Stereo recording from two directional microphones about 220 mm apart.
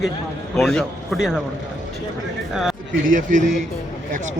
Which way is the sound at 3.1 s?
35° right (ahead or behind).